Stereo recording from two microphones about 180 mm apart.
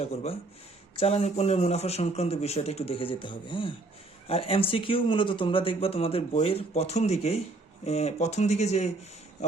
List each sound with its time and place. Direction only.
0.0 s speech: 35° left (ahead or behind)